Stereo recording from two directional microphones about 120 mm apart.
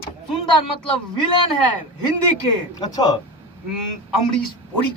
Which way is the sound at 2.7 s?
35° left (ahead or behind).